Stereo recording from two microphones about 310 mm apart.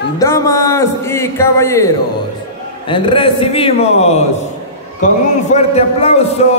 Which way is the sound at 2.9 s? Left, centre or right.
Centre.